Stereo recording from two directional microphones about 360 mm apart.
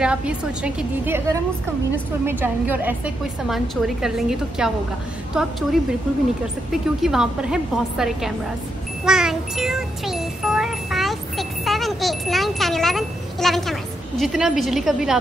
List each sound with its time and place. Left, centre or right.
0.0 s a woman's voice: centre